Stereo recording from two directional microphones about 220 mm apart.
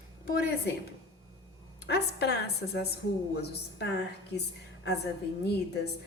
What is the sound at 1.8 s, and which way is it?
A woman's voice, 50° left (ahead or behind).